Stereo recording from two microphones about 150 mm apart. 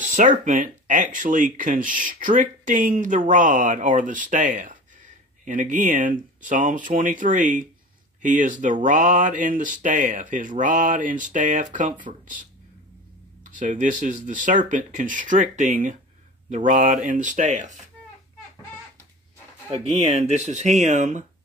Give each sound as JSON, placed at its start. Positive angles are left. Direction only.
{"t": 0.0, "sound": "a sound", "side_deg": -55}
{"t": 0.5, "sound": "speech", "side_deg": -60}
{"t": 13.6, "sound": "speech", "side_deg": -55}
{"t": 19.7, "sound": "speech", "side_deg": -45}